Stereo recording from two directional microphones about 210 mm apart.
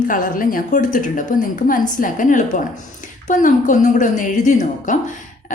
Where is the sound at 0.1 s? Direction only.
40° left (ahead or behind).